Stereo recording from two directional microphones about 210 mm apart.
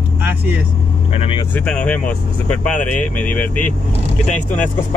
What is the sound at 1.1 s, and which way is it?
Speech, 30° left (ahead or behind).